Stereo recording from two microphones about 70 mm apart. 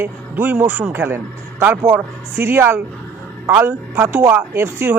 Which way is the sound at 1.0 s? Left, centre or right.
Right.